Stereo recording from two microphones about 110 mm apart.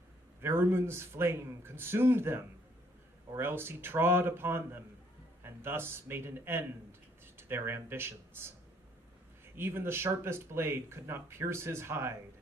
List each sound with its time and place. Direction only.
0.4 s speech: 25° right (ahead or behind)
9.6 s speech: 20° right (ahead or behind)